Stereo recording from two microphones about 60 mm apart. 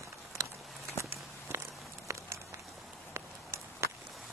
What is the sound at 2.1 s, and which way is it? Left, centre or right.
Walk, right.